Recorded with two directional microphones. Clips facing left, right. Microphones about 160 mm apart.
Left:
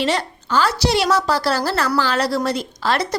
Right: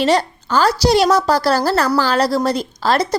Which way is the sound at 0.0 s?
40° right (ahead or behind).